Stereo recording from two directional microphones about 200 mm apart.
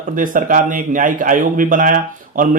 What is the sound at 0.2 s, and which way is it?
A man's voice, 40° right (ahead or behind).